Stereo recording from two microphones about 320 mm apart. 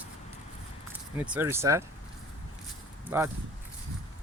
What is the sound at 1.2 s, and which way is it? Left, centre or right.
Speech, centre.